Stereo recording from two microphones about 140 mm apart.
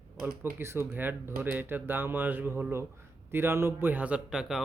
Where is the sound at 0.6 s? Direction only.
20° right (ahead or behind).